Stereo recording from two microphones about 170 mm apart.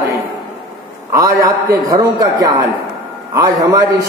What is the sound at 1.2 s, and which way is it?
A man's voice, 20° right (ahead or behind).